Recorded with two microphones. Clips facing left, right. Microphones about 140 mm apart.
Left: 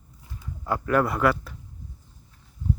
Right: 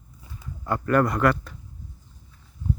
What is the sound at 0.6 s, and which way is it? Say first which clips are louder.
Speech: right 1 dB; 5° left (ahead or behind).